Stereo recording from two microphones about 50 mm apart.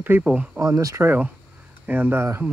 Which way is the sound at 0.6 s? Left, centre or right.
Right.